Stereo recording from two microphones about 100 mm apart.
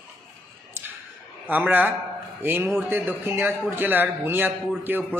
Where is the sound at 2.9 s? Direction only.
20° right (ahead or behind).